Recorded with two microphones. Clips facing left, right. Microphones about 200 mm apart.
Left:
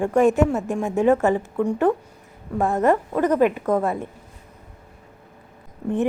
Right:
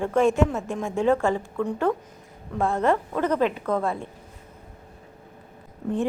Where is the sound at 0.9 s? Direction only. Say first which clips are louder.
Left 4 dB; 15° left (ahead or behind).